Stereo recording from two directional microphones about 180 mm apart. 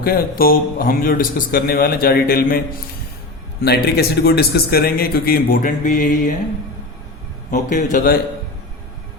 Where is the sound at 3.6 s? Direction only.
60° left (ahead or behind); by 6.3 s 45° left (ahead or behind).